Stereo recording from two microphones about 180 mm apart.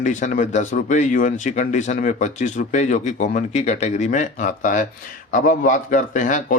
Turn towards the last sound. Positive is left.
turn(degrees=45)  # may be behind; listen again after turning